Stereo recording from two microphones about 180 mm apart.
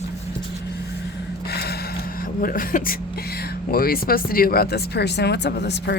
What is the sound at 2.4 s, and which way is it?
Speech, 50° left (ahead or behind).